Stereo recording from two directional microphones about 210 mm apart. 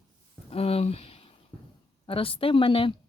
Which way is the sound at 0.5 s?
30° left (ahead or behind).